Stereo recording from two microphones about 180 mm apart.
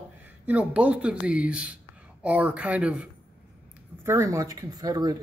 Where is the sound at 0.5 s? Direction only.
5° right (ahead or behind).